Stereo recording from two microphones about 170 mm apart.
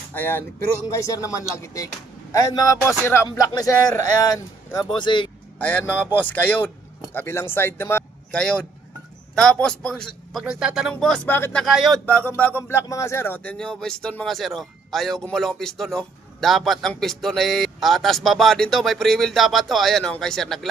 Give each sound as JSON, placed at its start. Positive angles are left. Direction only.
{"t": 0.1, "sound": "a man's voice", "side_deg": 10}
{"t": 5.6, "sound": "speech", "side_deg": 10}
{"t": 11.6, "sound": "speech", "side_deg": 0}